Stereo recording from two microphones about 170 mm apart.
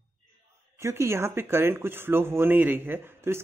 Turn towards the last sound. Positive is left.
turn(degrees=-15)  # may be behind; listen again after turning